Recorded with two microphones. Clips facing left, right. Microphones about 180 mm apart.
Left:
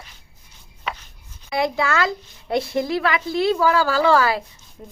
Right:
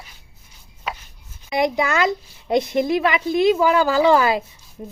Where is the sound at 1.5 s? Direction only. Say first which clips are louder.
Right 2 dB; 20° right (ahead or behind).